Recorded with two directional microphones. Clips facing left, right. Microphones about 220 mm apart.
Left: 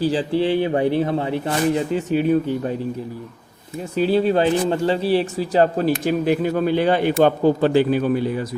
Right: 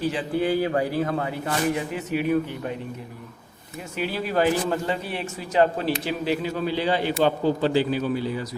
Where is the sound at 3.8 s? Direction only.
30° left (ahead or behind); by 8.5 s 55° left (ahead or behind).